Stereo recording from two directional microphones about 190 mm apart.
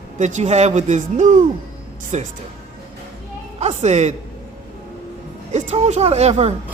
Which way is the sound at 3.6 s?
35° right (ahead or behind).